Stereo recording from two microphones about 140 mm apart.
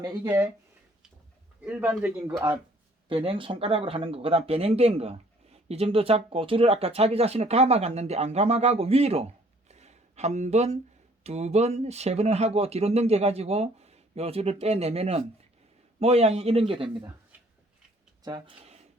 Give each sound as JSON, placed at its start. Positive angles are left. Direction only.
{"t": 0.3, "sound": "speech", "side_deg": -15}
{"t": 1.6, "sound": "speech", "side_deg": -10}
{"t": 3.1, "sound": "speech", "side_deg": -40}
{"t": 18.2, "sound": "speech", "side_deg": -30}